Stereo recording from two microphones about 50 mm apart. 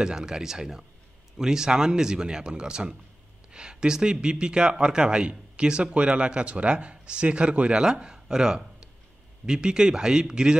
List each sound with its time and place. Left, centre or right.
0.0 s speech: centre